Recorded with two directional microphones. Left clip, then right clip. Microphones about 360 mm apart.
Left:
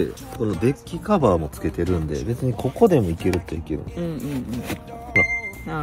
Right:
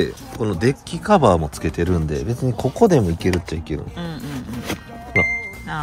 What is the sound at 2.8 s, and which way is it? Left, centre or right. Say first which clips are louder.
Speech: right 1 dB; right.